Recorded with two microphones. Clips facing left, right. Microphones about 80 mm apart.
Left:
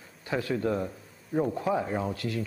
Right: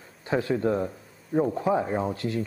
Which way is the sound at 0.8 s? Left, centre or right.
Centre.